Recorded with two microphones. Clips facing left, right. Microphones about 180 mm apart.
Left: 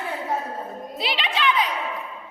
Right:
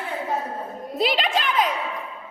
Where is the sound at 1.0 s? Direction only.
45° right (ahead or behind).